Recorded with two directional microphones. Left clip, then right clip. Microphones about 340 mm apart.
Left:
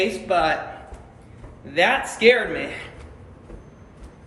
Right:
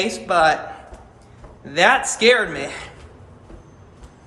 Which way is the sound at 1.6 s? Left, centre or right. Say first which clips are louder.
Right 4 dB; centre.